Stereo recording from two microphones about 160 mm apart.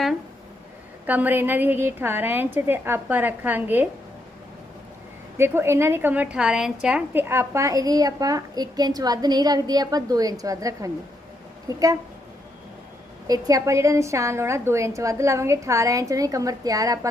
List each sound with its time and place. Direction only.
1.0 s a woman's voice: 10° right (ahead or behind)
5.4 s a woman's voice: 15° right (ahead or behind)
13.2 s a woman's voice: 20° right (ahead or behind)